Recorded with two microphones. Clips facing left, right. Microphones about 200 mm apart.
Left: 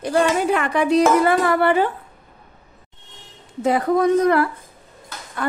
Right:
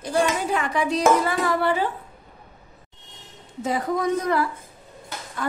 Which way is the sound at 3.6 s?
60° left (ahead or behind).